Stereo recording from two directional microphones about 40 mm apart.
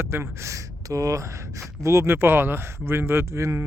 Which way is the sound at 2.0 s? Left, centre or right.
Right.